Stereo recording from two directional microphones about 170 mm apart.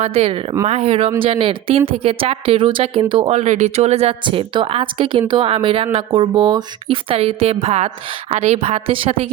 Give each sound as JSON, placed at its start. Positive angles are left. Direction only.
{"t": 0.0, "sound": "a woman's voice", "side_deg": -35}